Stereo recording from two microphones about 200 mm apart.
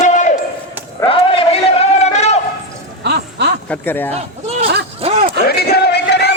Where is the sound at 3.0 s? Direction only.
55° right (ahead or behind).